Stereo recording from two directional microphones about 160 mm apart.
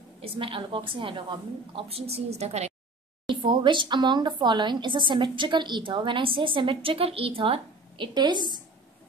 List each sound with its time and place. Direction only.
0.2 s a woman's voice: 35° right (ahead or behind)
3.3 s speech: 30° right (ahead or behind)